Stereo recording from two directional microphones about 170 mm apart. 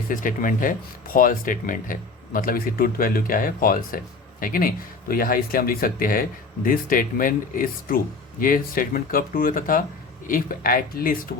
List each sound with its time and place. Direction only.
0.1 s speech: 50° left (ahead or behind)